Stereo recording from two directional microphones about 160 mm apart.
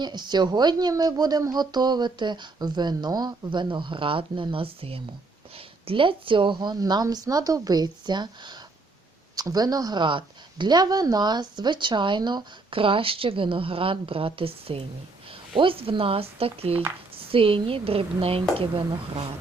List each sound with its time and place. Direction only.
0.0 s speech: 25° right (ahead or behind)